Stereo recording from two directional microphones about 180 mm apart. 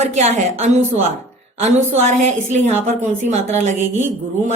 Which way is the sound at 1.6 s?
40° right (ahead or behind).